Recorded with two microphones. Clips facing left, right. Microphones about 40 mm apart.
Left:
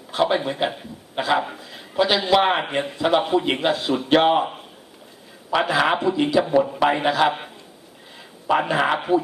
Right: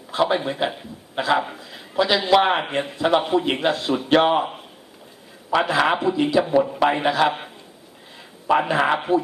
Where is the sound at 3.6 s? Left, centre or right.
Left.